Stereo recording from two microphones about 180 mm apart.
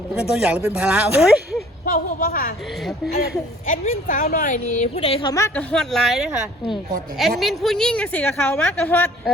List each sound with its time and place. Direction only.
0.1 s a woman's voice: 5° right (ahead or behind)
1.8 s a woman's voice: 50° left (ahead or behind)
3.7 s a woman's voice: 45° left (ahead or behind)
5.3 s a woman's voice: 15° left (ahead or behind)
5.7 s a woman's voice: centre (ahead or behind)